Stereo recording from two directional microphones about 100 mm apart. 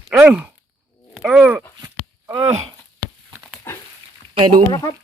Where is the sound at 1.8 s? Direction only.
30° right (ahead or behind).